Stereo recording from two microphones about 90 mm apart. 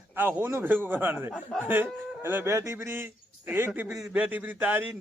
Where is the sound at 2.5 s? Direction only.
35° right (ahead or behind).